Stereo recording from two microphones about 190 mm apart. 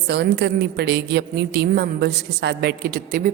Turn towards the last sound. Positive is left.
turn(degrees=-45)  # may be behind; listen again after turning